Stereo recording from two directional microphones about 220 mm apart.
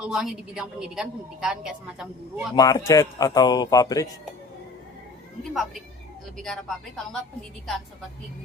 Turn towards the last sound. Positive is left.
turn(degrees=0)  # may be behind; listen again after turning